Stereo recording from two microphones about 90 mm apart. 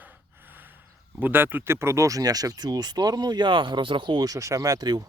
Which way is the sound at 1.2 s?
20° right (ahead or behind).